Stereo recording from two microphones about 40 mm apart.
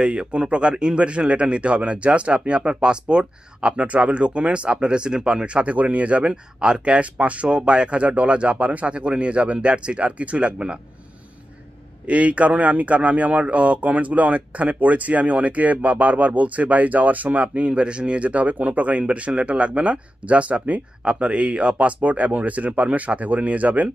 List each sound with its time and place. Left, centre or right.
0.0 s speech: right
6.3 s speech: right
12.1 s speech: right
21.0 s speech: right